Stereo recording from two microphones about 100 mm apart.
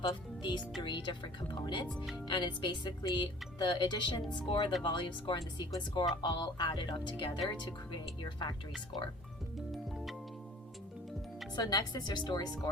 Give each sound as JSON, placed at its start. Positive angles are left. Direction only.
{"t": 0.0, "sound": "speech", "side_deg": 45}
{"t": 9.7, "sound": "music", "side_deg": 0}
{"t": 11.5, "sound": "speech", "side_deg": 40}